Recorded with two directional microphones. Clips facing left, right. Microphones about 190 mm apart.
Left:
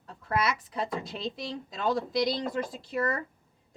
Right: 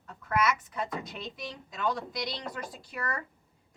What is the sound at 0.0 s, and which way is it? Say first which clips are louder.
Speech: even; 30° left (ahead or behind).